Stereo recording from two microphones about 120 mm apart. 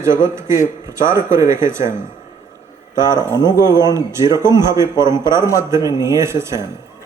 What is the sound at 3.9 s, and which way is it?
Speech, 25° right (ahead or behind).